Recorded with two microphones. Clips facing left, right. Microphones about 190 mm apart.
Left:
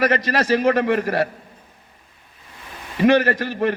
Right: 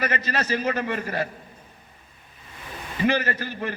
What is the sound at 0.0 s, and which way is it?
A man's voice, 75° left (ahead or behind).